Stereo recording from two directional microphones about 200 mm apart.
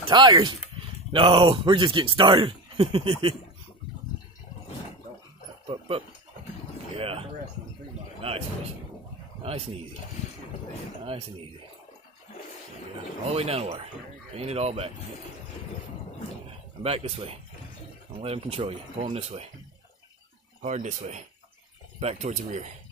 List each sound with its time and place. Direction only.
0.0 s speech: 20° right (ahead or behind)
5.7 s a man's voice: 25° right (ahead or behind)
13.3 s speech: 30° right (ahead or behind)
16.8 s speech: 30° right (ahead or behind)
20.6 s speech: 35° right (ahead or behind)